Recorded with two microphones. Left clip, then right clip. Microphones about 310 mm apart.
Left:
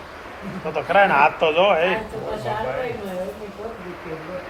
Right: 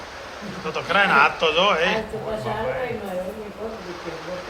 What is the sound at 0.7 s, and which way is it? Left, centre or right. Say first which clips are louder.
A man's voice: left 2 dB; centre.